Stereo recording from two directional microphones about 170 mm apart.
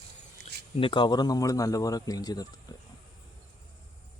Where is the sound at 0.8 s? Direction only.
30° left (ahead or behind).